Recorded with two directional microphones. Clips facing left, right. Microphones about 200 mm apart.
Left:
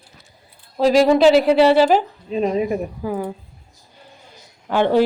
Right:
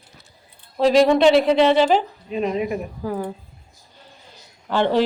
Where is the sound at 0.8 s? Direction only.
Centre (ahead or behind).